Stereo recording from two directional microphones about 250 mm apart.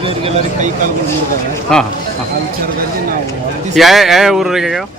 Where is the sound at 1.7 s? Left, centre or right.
Centre.